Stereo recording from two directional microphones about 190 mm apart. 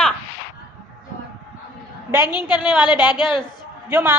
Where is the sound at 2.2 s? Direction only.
20° left (ahead or behind).